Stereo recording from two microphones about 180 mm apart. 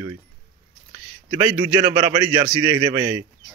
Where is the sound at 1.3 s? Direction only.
15° right (ahead or behind).